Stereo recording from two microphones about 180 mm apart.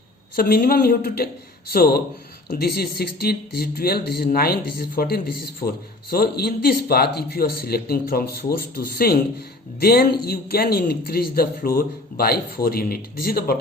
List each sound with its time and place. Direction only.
0.3 s a man's voice: 60° left (ahead or behind)